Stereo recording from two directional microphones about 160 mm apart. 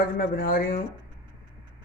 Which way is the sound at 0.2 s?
60° left (ahead or behind).